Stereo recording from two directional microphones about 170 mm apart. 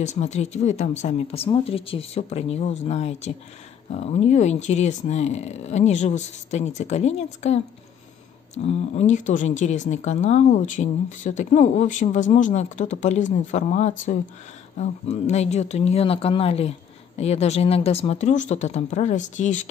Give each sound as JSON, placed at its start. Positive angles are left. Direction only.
{"t": 0.0, "sound": "speech", "side_deg": 40}
{"t": 8.6, "sound": "speech", "side_deg": 40}